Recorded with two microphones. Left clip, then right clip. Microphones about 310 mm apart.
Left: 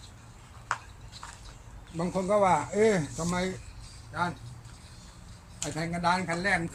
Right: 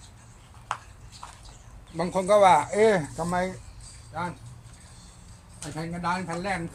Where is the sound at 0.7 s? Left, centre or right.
Centre.